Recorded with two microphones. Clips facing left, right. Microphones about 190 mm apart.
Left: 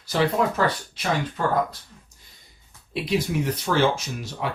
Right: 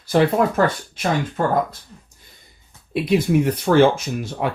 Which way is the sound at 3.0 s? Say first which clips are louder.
Right 7 dB; 55° right (ahead or behind).